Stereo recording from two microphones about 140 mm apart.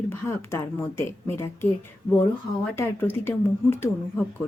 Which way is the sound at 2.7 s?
15° left (ahead or behind).